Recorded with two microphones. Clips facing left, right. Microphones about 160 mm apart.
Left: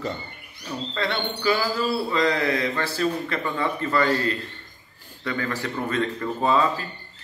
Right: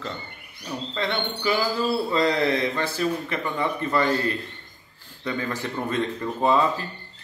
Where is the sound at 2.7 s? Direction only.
15° right (ahead or behind).